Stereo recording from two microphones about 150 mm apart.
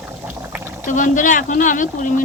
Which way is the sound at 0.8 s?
60° left (ahead or behind).